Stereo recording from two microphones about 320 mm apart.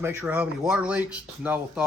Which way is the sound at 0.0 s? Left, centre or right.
Centre.